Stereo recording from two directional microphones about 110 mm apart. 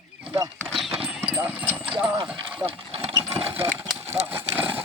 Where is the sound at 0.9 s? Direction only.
60° right (ahead or behind).